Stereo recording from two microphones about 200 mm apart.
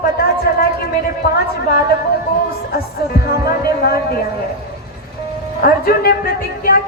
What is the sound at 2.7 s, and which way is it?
Speech, 50° left (ahead or behind).